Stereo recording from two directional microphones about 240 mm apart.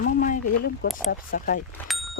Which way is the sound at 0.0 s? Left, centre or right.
Left.